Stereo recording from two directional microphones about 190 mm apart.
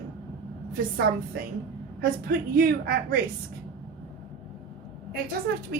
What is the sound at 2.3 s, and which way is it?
Speech, 55° right (ahead or behind).